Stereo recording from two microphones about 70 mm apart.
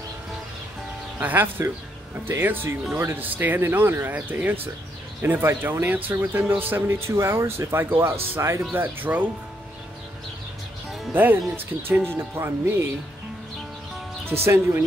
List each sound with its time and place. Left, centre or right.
1.2 s speech: right
8.7 s speech: right
11.5 s speech: right
14.2 s speech: right